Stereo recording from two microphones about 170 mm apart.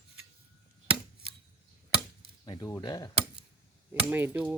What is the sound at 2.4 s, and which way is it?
Speech, 25° left (ahead or behind).